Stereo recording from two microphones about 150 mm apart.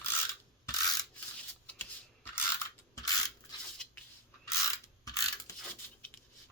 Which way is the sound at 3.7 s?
5° left (ahead or behind).